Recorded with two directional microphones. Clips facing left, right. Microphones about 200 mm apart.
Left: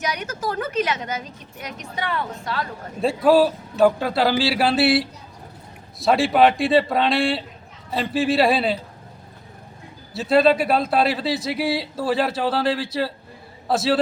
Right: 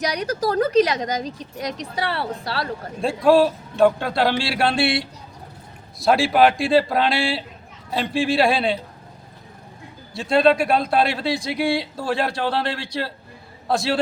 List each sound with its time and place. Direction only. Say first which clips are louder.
0.0 s a woman's voice: right 4 dB; 35° right (ahead or behind)
3.0 s speech: even; centre (ahead or behind)
10.1 s speech: even; 5° left (ahead or behind)